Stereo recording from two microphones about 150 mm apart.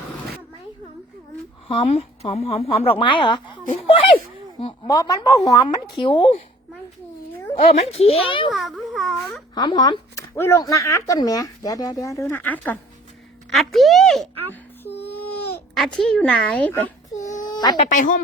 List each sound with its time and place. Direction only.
1.6 s a woman's voice: 35° left (ahead or behind)
4.9 s a woman's voice: 25° left (ahead or behind)
7.5 s a woman's voice: 45° left (ahead or behind)
8.4 s a child's voice: centre (ahead or behind)
9.6 s speech: 25° left (ahead or behind)
13.5 s a child's voice: centre (ahead or behind)
14.8 s a sound: 90° left
15.7 s a child's voice: centre (ahead or behind)
17.4 s a sound: 25° left (ahead or behind)
17.7 s speech: 60° left (ahead or behind)